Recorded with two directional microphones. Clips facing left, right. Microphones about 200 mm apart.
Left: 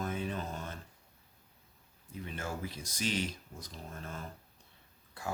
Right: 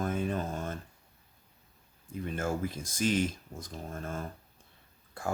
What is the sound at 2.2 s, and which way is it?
Speech, 50° right (ahead or behind).